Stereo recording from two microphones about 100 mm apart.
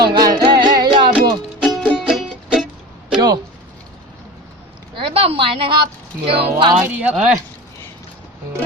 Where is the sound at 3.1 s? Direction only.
45° right (ahead or behind).